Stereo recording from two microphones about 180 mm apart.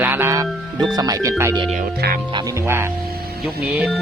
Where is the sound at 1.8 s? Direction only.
60° right (ahead or behind).